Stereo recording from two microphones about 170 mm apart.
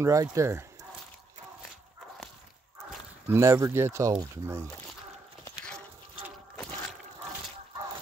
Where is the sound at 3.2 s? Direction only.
15° right (ahead or behind).